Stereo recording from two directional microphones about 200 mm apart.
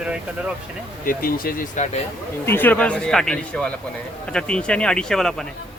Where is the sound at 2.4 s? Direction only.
10° left (ahead or behind).